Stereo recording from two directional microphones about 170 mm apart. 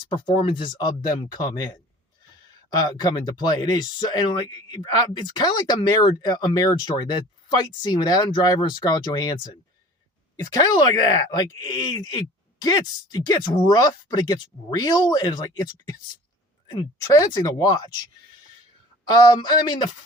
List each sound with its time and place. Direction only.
0.1 s speech: 30° left (ahead or behind)
2.8 s speech: 25° left (ahead or behind)
10.5 s speech: 25° left (ahead or behind)
17.2 s speech: 25° left (ahead or behind)
19.0 s speech: 25° left (ahead or behind)